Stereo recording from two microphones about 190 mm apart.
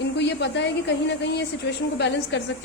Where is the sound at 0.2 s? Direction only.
65° left (ahead or behind).